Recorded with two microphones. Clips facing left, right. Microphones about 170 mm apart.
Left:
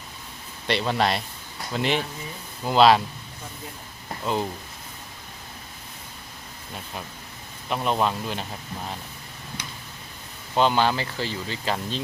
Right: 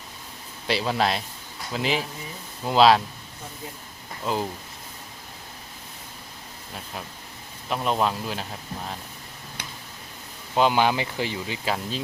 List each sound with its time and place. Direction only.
0.7 s speech: centre (ahead or behind)
4.2 s speech: centre (ahead or behind)
7.7 s speech: centre (ahead or behind)
9.6 s tick-tock: 60° right (ahead or behind)
10.5 s speech: 10° right (ahead or behind)